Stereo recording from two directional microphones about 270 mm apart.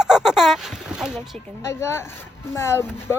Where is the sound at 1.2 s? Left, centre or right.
Centre.